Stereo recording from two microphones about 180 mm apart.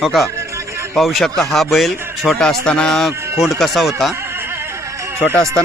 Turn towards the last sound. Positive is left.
turn(degrees=-10)  # may be behind; listen again after turning